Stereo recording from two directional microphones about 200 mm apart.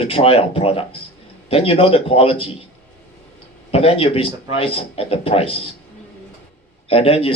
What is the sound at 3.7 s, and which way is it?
A man's voice, 30° left (ahead or behind).